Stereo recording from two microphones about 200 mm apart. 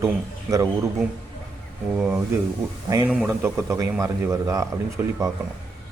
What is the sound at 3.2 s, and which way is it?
A man's voice, 15° right (ahead or behind).